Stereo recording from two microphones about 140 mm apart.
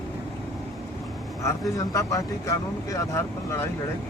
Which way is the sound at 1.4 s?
20° left (ahead or behind).